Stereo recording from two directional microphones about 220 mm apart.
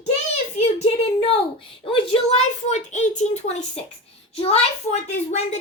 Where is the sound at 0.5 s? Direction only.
30° left (ahead or behind).